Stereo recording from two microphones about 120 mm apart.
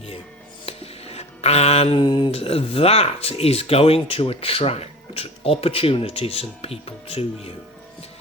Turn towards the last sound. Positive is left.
turn(degrees=55)  # may be behind; listen again after turning